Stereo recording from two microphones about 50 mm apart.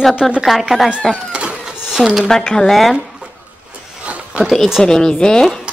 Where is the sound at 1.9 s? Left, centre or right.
Centre.